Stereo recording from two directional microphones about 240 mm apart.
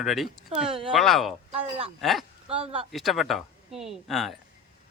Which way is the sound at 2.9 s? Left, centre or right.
Centre.